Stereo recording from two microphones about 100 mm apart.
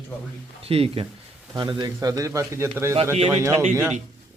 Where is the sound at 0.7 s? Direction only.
75° right (ahead or behind).